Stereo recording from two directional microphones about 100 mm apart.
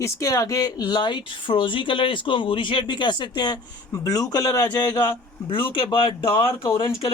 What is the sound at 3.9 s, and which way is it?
A man's voice, 35° left (ahead or behind).